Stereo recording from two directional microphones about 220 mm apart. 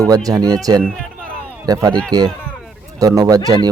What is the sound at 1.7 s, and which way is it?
Speech, 15° right (ahead or behind).